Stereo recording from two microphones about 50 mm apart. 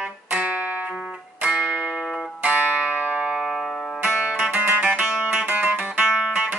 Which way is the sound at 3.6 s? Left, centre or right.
Centre.